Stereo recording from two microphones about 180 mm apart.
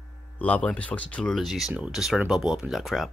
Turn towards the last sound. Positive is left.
turn(degrees=0)  # may be behind; listen again after turning